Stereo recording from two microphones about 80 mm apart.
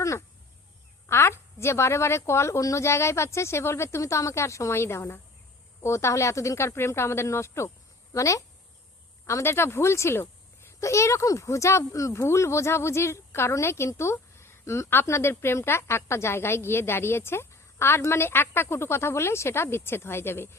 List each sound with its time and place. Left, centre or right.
1.0 s a child's voice: left